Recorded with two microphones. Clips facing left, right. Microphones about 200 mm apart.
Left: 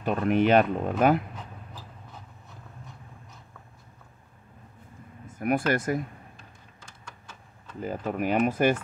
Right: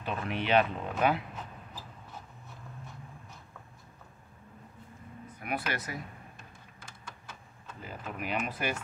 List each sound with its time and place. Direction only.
0.0 s speech: 45° left (ahead or behind)
5.2 s speech: 45° left (ahead or behind)
7.8 s speech: 45° left (ahead or behind)